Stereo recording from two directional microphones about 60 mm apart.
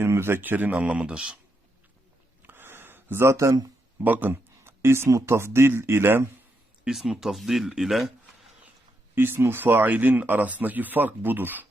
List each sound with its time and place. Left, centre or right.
0.0 s speech: right
0.8 s speech: centre
2.5 s a sound: right
4.0 s speech: right
5.0 s speech: right
6.8 s speech: centre
9.1 s speech: right